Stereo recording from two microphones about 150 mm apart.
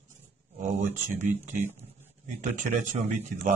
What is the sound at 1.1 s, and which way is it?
Speech, 50° right (ahead or behind).